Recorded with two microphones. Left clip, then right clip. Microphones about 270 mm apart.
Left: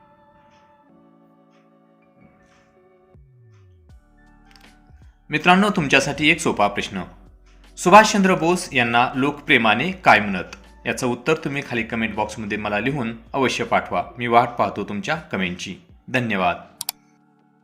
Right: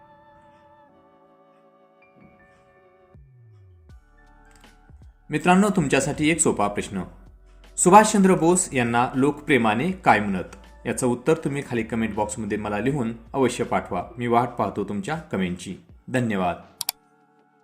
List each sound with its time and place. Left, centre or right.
5.3 s speech: centre
16.6 s computer keyboard: centre